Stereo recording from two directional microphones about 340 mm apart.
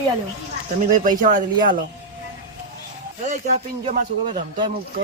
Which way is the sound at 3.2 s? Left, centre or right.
Right.